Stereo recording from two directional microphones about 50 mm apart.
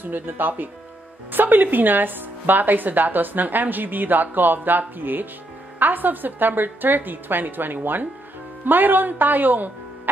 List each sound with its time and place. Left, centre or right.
0.0 s speech: right